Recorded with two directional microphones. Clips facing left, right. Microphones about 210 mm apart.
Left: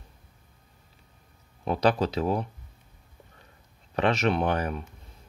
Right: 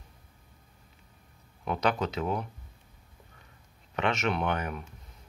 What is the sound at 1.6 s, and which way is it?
Speech, 35° left (ahead or behind).